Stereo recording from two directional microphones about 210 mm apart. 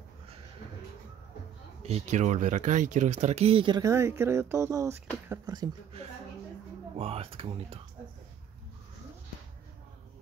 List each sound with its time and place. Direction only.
1.8 s speech: 30° right (ahead or behind)
7.0 s speech: 25° right (ahead or behind)